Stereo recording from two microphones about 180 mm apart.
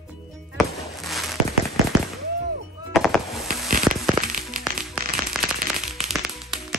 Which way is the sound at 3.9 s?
5° right (ahead or behind).